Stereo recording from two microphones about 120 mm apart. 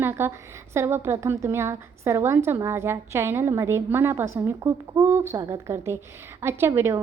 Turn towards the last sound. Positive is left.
turn(degrees=-20)  # may be behind; listen again after turning